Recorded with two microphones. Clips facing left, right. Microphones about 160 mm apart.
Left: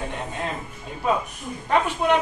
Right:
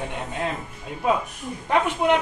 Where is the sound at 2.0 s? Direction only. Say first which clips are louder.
Right 1 dB; 15° right (ahead or behind).